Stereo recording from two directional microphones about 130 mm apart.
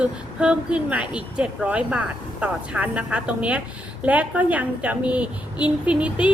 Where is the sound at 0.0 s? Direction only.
10° right (ahead or behind).